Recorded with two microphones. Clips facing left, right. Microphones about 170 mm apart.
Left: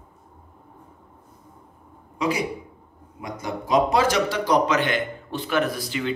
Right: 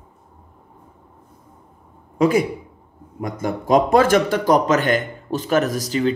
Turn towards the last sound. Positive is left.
turn(degrees=-40)  # may be behind; listen again after turning